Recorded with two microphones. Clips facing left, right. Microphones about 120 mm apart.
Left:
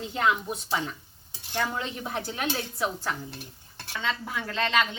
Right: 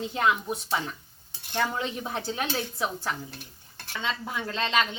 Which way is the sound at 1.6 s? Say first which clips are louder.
Right 3 dB; 15° right (ahead or behind).